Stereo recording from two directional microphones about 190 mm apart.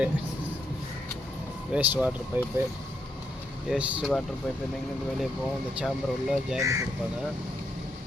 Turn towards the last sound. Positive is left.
turn(degrees=-15)  # may be behind; listen again after turning